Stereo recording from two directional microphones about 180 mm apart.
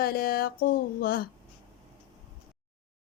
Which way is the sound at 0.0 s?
55° left (ahead or behind).